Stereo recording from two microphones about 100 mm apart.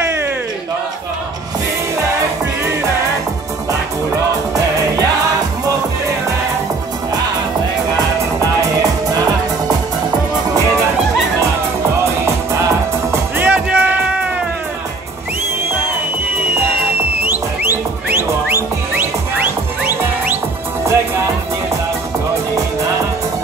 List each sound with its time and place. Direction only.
13.1 s music: 15° right (ahead or behind)
18.1 s music: 20° right (ahead or behind)
20.8 s music: 30° right (ahead or behind)